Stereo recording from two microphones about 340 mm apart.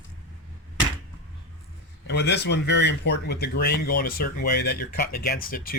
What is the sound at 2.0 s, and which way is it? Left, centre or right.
Speech, left.